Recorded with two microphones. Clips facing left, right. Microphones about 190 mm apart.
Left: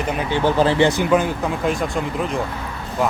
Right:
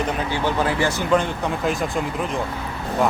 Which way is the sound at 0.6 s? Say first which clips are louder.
Left 5 dB; 25° left (ahead or behind).